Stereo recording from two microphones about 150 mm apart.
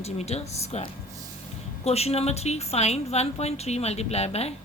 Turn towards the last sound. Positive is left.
turn(degrees=45)  # may be behind; listen again after turning